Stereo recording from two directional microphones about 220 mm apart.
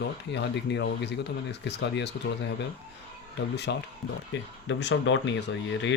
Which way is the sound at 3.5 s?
50° left (ahead or behind).